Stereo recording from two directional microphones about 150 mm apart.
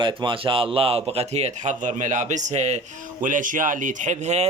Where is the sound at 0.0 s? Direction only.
35° right (ahead or behind).